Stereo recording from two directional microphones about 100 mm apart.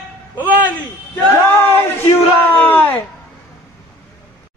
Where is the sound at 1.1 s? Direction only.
20° left (ahead or behind).